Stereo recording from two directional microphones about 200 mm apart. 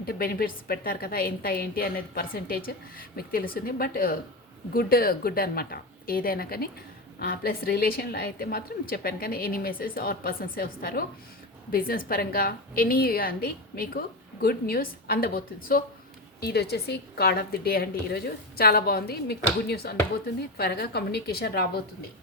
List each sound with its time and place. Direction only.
0.0 s a woman's voice: 50° left (ahead or behind)